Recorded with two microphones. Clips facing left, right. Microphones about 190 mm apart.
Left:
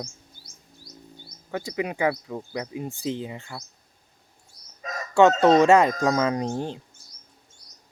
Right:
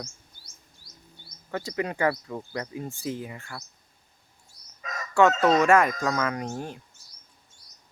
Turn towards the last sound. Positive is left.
turn(degrees=30)  # may be behind; listen again after turning